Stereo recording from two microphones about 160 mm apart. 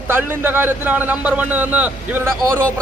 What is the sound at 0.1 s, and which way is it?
A man's voice, 15° right (ahead or behind).